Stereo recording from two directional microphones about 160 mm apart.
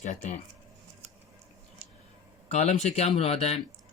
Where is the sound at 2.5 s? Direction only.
45° left (ahead or behind).